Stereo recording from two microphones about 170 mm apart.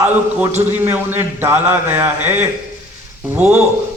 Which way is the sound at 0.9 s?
15° right (ahead or behind).